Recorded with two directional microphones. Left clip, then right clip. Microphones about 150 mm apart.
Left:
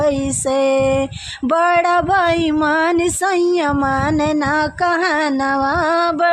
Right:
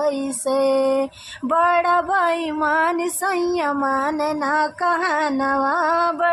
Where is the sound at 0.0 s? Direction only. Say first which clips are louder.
Left 4 dB; 35° left (ahead or behind).